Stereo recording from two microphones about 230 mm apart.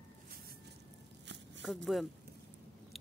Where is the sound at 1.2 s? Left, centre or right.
Right.